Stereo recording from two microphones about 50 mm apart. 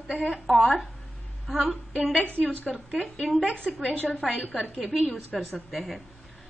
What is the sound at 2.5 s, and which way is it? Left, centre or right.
Speech, centre.